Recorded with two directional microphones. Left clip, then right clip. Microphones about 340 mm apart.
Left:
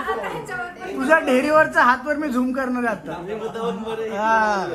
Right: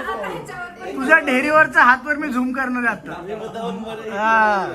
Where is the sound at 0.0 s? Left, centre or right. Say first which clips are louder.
Even; centre.